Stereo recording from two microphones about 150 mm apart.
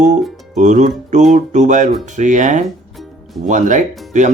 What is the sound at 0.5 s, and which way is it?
Speech, 55° right (ahead or behind).